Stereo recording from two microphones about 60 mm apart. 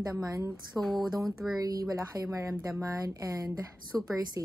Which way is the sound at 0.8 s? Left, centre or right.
Centre.